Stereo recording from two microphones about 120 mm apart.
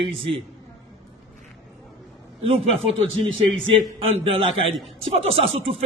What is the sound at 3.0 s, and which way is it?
A man's voice, 45° right (ahead or behind).